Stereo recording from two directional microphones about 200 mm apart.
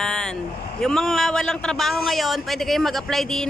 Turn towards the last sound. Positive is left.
turn(degrees=0)  # may be behind; listen again after turning